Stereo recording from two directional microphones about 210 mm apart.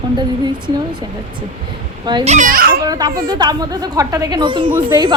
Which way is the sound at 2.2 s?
35° right (ahead or behind).